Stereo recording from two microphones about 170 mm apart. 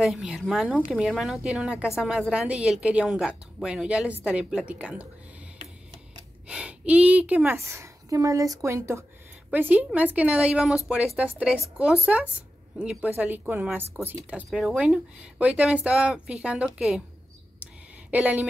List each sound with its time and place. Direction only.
0.0 s a woman's voice: 5° right (ahead or behind)
6.4 s a woman's voice: 5° right (ahead or behind)
18.1 s speech: 10° right (ahead or behind)